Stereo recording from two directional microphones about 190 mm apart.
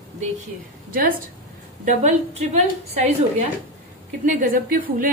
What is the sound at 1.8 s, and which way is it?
A woman's voice, 35° right (ahead or behind).